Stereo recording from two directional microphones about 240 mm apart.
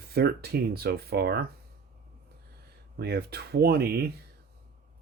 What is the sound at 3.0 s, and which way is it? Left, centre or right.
Speech, right.